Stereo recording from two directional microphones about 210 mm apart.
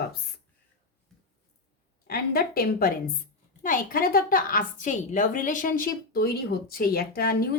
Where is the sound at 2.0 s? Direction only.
45° left (ahead or behind).